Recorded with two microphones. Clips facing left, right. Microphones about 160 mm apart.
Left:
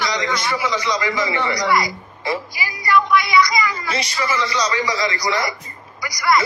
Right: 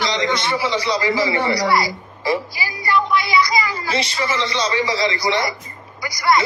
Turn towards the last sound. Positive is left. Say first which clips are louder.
# right 1 dB
turn(degrees=-25)  # may be behind; listen again after turning